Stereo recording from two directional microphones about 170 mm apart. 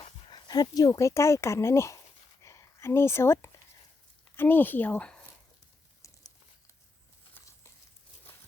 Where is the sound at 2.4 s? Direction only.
15° left (ahead or behind).